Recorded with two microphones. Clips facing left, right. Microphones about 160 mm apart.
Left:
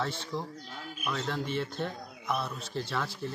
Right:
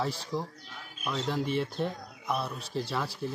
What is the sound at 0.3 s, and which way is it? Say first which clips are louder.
Speech: right 2 dB; 35° right (ahead or behind).